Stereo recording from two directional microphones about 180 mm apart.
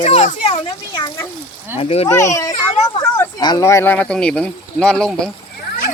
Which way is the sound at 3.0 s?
20° left (ahead or behind).